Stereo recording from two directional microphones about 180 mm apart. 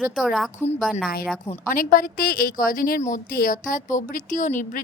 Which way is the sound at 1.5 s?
50° left (ahead or behind).